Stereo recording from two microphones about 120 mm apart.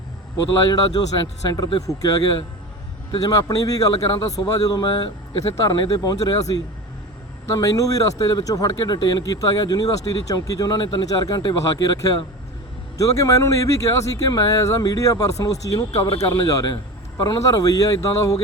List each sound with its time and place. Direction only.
0.3 s a man's voice: 35° left (ahead or behind)
7.5 s speech: 30° left (ahead or behind)